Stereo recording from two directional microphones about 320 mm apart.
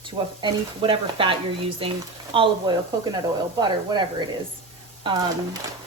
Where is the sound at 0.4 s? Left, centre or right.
Centre.